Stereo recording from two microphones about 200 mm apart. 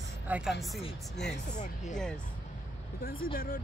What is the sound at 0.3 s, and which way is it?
Speech, centre (ahead or behind).